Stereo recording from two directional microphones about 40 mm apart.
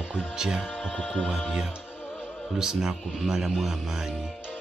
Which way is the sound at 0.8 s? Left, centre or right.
Left.